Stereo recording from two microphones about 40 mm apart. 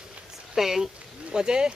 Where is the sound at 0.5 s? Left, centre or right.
Centre.